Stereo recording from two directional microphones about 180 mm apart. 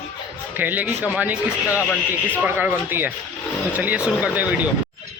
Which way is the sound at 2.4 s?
10° right (ahead or behind).